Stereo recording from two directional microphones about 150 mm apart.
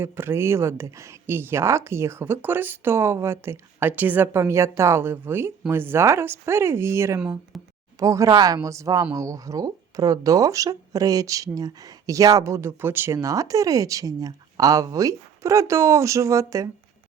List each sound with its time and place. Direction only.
0.0 s speech: 15° right (ahead or behind)
7.2 s speech: 5° right (ahead or behind)
7.9 s speech: 20° right (ahead or behind)